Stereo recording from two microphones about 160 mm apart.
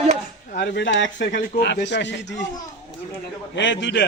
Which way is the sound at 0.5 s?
90° left.